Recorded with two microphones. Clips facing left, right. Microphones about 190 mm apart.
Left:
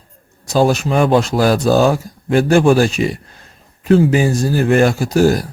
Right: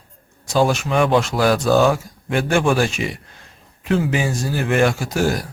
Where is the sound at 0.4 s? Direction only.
40° left (ahead or behind).